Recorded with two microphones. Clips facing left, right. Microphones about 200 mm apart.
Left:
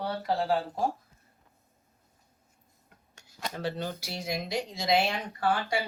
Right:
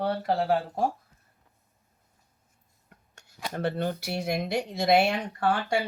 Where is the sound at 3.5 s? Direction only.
55° right (ahead or behind).